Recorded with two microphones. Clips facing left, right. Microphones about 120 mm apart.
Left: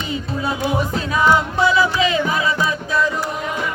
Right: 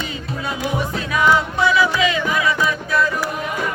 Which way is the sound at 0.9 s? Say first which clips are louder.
Even; 30° left (ahead or behind).